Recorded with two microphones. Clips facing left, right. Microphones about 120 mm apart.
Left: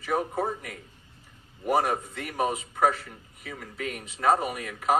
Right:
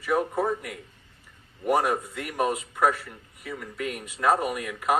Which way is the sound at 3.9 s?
50° right (ahead or behind).